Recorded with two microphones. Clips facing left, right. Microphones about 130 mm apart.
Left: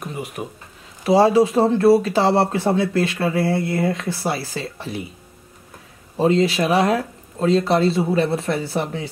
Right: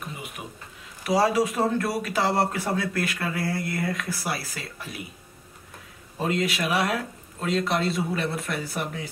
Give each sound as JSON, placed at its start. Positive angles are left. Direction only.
{"t": 0.4, "sound": "speech", "side_deg": 40}
{"t": 1.0, "sound": "speech", "side_deg": 30}
{"t": 6.1, "sound": "speech", "side_deg": 30}